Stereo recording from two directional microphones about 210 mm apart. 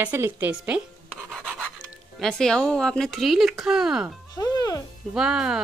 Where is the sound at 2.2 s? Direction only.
5° left (ahead or behind).